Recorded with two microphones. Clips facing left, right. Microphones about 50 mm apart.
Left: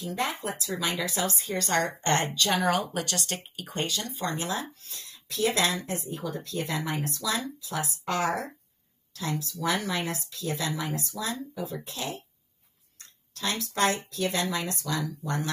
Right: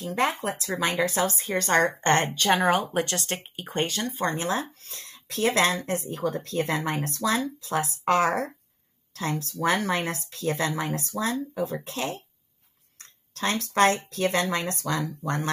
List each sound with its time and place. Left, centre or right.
0.0 s speech: right
13.0 s a sound: right
14.1 s speech: right